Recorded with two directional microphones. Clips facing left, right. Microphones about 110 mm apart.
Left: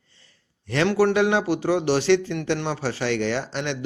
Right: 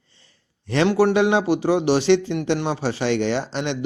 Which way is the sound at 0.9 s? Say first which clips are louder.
Right 2 dB; 15° right (ahead or behind).